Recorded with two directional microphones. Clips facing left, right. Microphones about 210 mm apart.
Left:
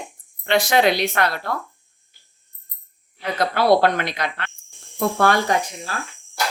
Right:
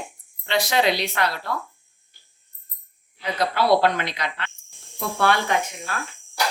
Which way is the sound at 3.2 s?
50° left (ahead or behind).